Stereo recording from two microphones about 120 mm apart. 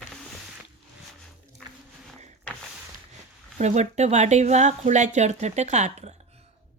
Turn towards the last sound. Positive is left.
turn(degrees=-70)  # may be behind; listen again after turning